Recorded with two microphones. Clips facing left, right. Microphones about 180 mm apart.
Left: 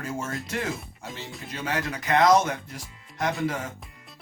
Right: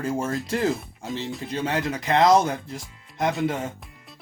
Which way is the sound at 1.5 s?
25° right (ahead or behind).